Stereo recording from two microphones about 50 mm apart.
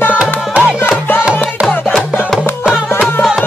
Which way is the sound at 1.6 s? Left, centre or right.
Centre.